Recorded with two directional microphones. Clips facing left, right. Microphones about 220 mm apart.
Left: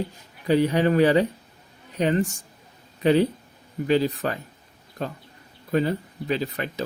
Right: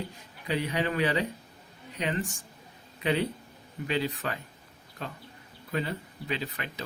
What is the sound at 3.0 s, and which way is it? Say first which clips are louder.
Speech: left 9 dB; 40° left (ahead or behind).